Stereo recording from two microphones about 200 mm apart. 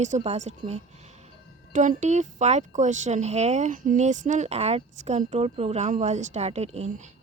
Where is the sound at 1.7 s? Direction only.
40° right (ahead or behind).